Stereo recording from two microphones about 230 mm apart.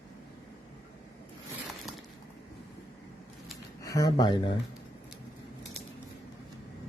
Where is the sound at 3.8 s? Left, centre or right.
Centre.